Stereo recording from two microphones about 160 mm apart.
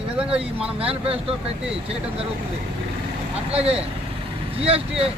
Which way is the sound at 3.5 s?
40° right (ahead or behind).